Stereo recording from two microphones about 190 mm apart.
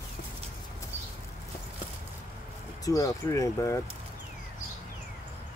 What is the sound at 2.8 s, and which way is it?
Speech, 15° left (ahead or behind).